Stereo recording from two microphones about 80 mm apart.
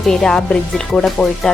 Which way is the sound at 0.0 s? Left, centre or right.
Centre.